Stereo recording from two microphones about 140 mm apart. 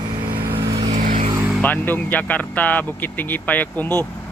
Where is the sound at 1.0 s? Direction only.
75° right (ahead or behind).